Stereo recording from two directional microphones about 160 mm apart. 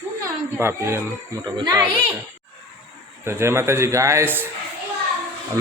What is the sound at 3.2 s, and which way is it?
Speech, 15° right (ahead or behind).